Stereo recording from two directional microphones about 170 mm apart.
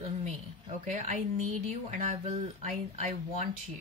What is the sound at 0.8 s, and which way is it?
Speech, 45° right (ahead or behind).